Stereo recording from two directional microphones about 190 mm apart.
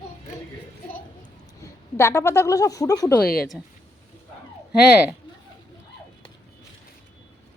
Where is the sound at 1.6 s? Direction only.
15° left (ahead or behind).